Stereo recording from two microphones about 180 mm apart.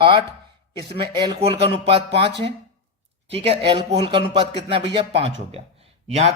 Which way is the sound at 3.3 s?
35° right (ahead or behind).